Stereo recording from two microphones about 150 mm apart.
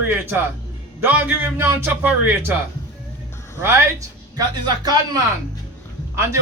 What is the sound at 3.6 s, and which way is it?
A man's voice, 20° right (ahead or behind).